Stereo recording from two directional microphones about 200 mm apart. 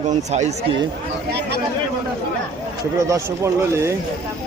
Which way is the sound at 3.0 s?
15° right (ahead or behind).